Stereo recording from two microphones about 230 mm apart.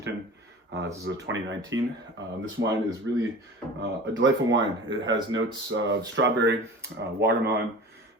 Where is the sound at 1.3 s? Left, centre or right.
Right.